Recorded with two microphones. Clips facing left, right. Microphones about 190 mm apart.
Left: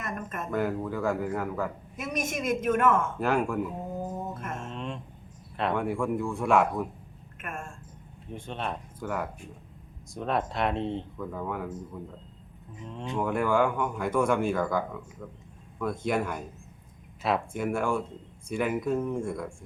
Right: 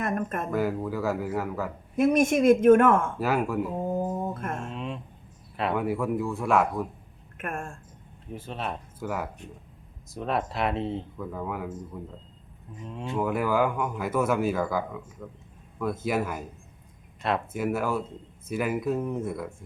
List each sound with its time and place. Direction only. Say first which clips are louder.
0.0 s a sound: right 7 dB; 50° right (ahead or behind)
0.5 s speech: even; 5° right (ahead or behind)
2.0 s a woman's voice: right 11 dB; 55° right (ahead or behind)
3.2 s speech: right 1 dB; 5° right (ahead or behind)
3.9 s mantra: right 5 dB; 55° right (ahead or behind)
4.7 s a sound: right 2 dB; 5° right (ahead or behind)
5.5 s speech: right 1 dB; 5° right (ahead or behind)
7.3 s speech: right 5 dB; 55° right (ahead or behind)
8.3 s speech: right 1 dB; 5° right (ahead or behind)